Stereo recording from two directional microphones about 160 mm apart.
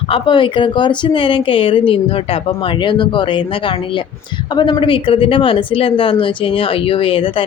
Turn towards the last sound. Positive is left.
turn(degrees=35)  # may be behind; listen again after turning